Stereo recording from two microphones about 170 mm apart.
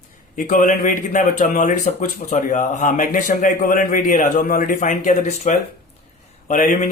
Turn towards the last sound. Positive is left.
turn(degrees=45)  # may be behind; listen again after turning